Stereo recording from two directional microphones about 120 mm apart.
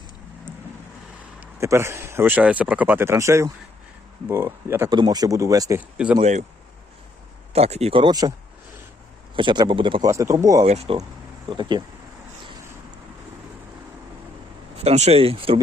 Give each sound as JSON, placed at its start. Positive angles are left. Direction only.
{"t": 1.5, "sound": "speech", "side_deg": -25}
{"t": 4.9, "sound": "speech", "side_deg": -35}
{"t": 7.5, "sound": "speech", "side_deg": -60}
{"t": 7.9, "sound": "speech", "side_deg": -35}
{"t": 9.3, "sound": "speech", "side_deg": -40}
{"t": 10.0, "sound": "speech", "side_deg": -25}
{"t": 10.7, "sound": "speech", "side_deg": -65}
{"t": 11.4, "sound": "speech", "side_deg": -40}
{"t": 14.8, "sound": "speech", "side_deg": -65}